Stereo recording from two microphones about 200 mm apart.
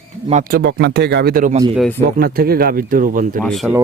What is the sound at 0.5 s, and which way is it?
Speech, 55° right (ahead or behind).